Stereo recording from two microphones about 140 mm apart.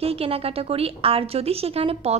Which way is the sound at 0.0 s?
45° right (ahead or behind).